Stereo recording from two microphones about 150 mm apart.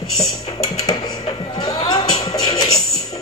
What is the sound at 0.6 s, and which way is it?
Music, 25° left (ahead or behind).